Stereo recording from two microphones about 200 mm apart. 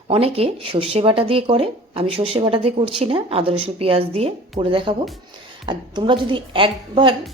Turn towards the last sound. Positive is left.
turn(degrees=-25)  # may be behind; listen again after turning